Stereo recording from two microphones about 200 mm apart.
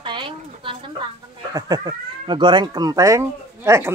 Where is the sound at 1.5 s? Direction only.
20° right (ahead or behind).